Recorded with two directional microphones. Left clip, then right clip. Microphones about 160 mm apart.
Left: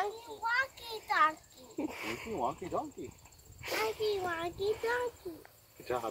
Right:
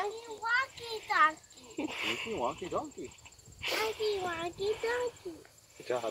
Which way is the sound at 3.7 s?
Centre (ahead or behind).